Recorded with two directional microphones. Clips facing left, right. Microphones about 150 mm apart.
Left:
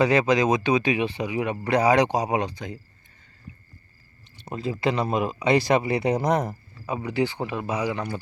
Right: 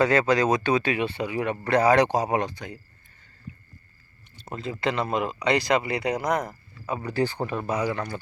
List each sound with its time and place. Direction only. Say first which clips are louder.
0.0 s speech: left 1 dB; 15° left (ahead or behind)
4.4 s speech: left 3 dB; 20° left (ahead or behind)
6.8 s speech: left 1 dB; 15° left (ahead or behind)